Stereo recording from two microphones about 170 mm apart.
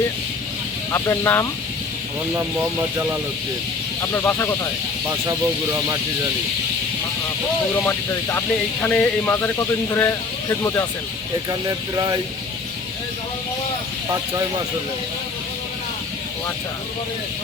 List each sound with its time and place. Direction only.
0.9 s speech: 15° left (ahead or behind)
4.1 s speech: 15° left (ahead or behind)
7.9 s speech: 10° left (ahead or behind)
11.9 s speech: 20° right (ahead or behind)